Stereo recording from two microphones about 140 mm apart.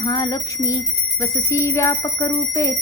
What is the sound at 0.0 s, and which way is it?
Speech, 30° left (ahead or behind).